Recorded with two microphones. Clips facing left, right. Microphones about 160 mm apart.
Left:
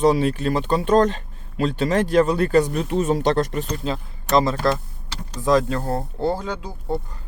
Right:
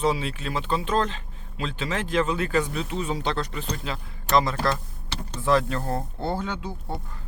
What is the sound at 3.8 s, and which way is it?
Speech, 35° left (ahead or behind).